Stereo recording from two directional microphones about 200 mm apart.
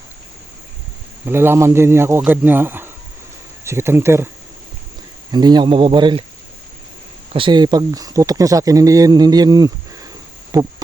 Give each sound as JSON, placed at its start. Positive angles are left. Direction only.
{"t": 1.2, "sound": "speech", "side_deg": -10}
{"t": 5.3, "sound": "speech", "side_deg": -20}
{"t": 7.3, "sound": "speech", "side_deg": -25}
{"t": 10.5, "sound": "a sound", "side_deg": -15}